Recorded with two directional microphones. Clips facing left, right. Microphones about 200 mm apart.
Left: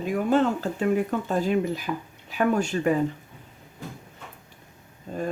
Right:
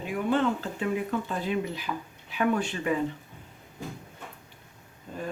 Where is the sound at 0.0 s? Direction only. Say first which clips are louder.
Left 4 dB; 40° left (ahead or behind).